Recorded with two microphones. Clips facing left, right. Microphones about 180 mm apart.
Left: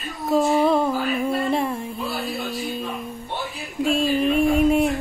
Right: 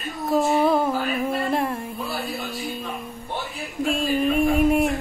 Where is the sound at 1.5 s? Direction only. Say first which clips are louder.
Left 1 dB; centre (ahead or behind).